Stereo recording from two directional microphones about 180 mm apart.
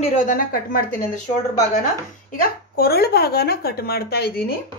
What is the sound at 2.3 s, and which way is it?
A woman's voice, 55° left (ahead or behind).